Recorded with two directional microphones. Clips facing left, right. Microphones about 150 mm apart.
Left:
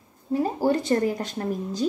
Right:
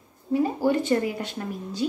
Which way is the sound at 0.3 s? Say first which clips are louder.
Even; 40° left (ahead or behind).